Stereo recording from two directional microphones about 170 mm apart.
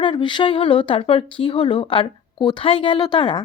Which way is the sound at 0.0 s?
30° left (ahead or behind).